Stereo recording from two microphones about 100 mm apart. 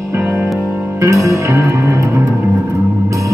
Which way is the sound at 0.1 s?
15° right (ahead or behind).